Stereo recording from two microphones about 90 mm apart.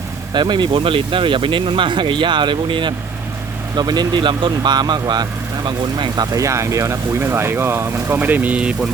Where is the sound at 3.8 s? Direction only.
50° right (ahead or behind).